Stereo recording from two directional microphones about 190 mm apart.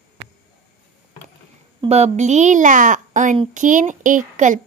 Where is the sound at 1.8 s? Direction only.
35° right (ahead or behind).